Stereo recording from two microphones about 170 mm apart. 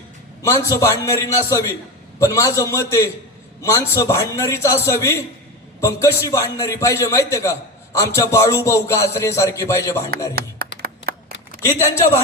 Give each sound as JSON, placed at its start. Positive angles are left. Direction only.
{"t": 0.4, "sound": "a man's voice", "side_deg": 15}
{"t": 10.6, "sound": "a sound", "side_deg": -65}
{"t": 11.8, "sound": "a man's voice", "side_deg": 15}